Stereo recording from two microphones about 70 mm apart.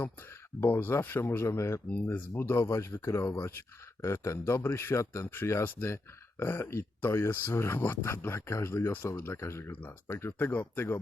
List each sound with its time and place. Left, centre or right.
0.6 s speech: left
1.5 s speech: left